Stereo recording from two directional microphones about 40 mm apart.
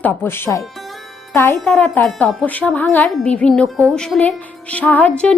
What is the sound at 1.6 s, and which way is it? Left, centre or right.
Speech, left.